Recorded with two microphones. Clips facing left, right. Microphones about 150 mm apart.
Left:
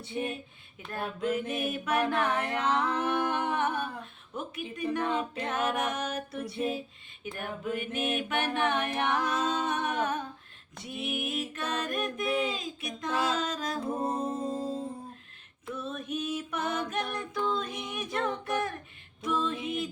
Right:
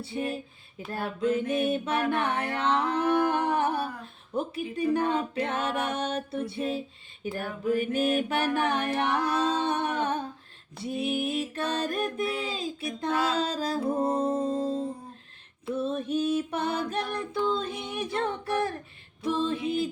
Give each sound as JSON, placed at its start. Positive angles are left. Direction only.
{"t": 0.0, "sound": "female singing", "side_deg": -30}
{"t": 1.3, "sound": "mantra", "side_deg": -30}
{"t": 2.6, "sound": "female singing", "side_deg": -30}
{"t": 14.2, "sound": "music", "side_deg": -30}
{"t": 15.7, "sound": "female singing", "side_deg": -30}